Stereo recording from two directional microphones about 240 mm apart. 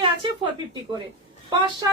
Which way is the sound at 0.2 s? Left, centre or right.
Right.